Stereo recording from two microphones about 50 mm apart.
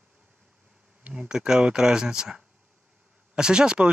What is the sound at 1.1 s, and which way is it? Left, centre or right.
Speech, centre.